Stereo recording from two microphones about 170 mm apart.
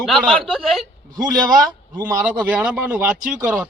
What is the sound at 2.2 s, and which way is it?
Speech, 5° right (ahead or behind).